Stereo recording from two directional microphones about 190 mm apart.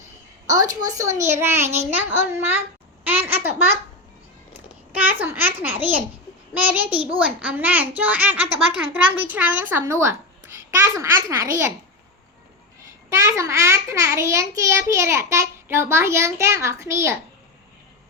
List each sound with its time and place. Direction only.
0.7 s a child's voice: 20° right (ahead or behind)
4.9 s a child's voice: 10° right (ahead or behind)
13.1 s a child's voice: 15° right (ahead or behind)